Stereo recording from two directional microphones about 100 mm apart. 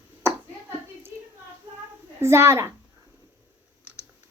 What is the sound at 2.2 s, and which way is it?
Speech, 25° right (ahead or behind).